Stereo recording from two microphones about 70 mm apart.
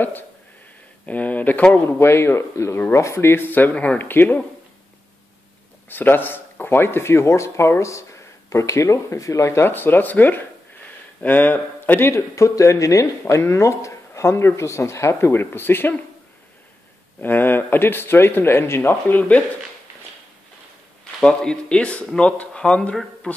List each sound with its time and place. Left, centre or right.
1.0 s speech: left
1.9 s speech: left
5.9 s speech: left
12.1 s speech: left
13.3 s speech: left
17.2 s speech: left
21.0 s speech: centre